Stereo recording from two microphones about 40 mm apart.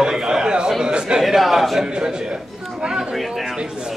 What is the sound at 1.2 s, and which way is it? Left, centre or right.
Speech, centre.